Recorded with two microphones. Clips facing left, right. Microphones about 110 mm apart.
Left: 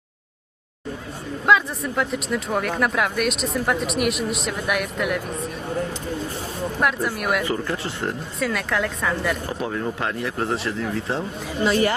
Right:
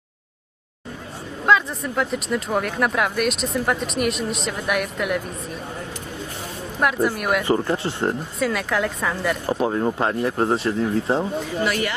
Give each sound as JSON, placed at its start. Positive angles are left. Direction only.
{"t": 1.5, "sound": "speech", "side_deg": 0}
{"t": 6.7, "sound": "speech", "side_deg": 0}
{"t": 7.4, "sound": "speech", "side_deg": -30}
{"t": 8.4, "sound": "speech", "side_deg": 0}
{"t": 9.5, "sound": "speech", "side_deg": -30}
{"t": 11.6, "sound": "speech", "side_deg": 25}